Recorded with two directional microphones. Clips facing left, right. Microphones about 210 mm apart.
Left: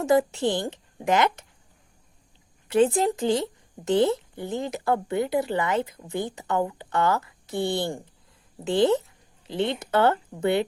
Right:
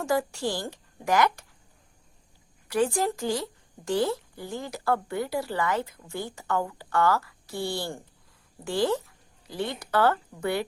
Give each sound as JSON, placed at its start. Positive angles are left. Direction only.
{"t": 0.0, "sound": "speech", "side_deg": 20}
{"t": 2.6, "sound": "speech", "side_deg": 20}